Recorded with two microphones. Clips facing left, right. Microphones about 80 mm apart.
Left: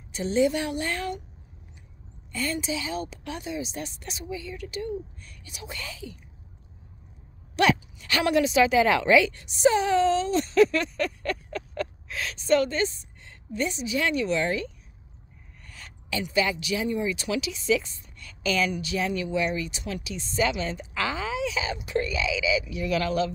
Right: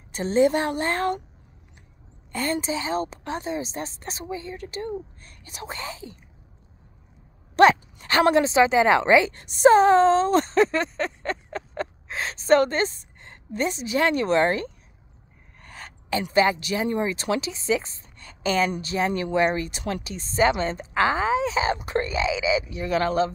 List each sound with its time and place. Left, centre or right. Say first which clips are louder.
0.1 s a woman's voice: right 3 dB; right
2.3 s speech: right 3 dB; right
7.5 s speech: right 7 dB; right
9.4 s speech: right 7 dB; right